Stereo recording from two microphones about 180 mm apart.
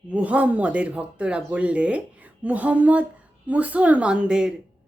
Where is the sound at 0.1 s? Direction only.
5° right (ahead or behind).